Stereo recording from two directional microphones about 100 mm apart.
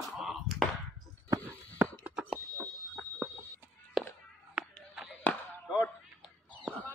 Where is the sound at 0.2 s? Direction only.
Centre (ahead or behind).